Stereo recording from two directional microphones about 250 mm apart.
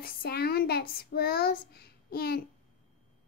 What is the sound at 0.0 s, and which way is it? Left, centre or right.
Child singing, left.